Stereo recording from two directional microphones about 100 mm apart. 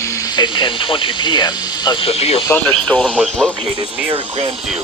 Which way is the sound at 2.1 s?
90° left.